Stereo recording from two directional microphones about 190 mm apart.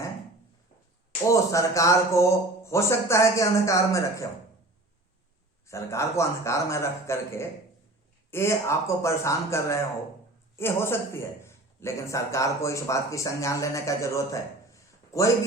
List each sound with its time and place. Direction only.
1.3 s a man's voice: 15° left (ahead or behind)
5.6 s a man's voice: 15° left (ahead or behind)